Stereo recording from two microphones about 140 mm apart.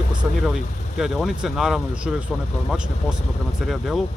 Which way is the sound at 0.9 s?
5° right (ahead or behind).